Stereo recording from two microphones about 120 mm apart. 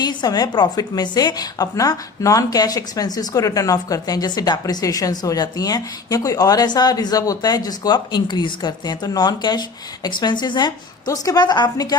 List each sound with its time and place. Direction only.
0.0 s a woman's voice: 35° left (ahead or behind)